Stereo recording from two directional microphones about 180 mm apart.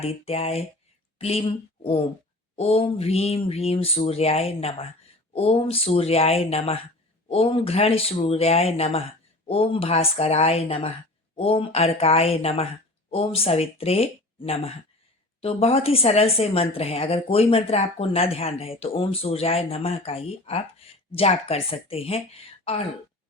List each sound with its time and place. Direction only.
0.0 s a woman's voice: 35° left (ahead or behind)